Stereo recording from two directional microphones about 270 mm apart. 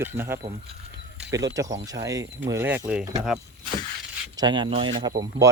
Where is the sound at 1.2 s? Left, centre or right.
Centre.